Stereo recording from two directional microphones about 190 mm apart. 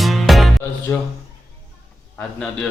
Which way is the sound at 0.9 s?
15° left (ahead or behind).